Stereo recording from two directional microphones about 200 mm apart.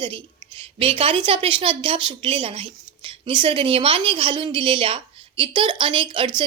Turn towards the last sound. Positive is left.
turn(degrees=-25)  # may be behind; listen again after turning